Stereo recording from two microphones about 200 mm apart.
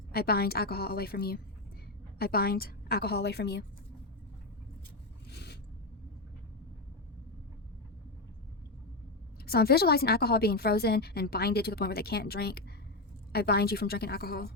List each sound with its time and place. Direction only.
0.1 s a woman's voice: 50° left (ahead or behind)
5.3 s a sound: 55° left (ahead or behind)
9.5 s a woman's voice: 50° left (ahead or behind)